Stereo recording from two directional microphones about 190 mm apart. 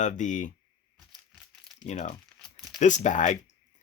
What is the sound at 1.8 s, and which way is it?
Speech, 35° left (ahead or behind).